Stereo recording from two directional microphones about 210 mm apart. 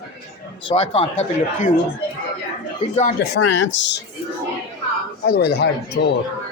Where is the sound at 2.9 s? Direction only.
35° left (ahead or behind).